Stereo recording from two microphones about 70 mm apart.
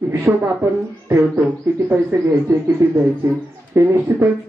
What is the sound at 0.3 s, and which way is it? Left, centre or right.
Speech, right.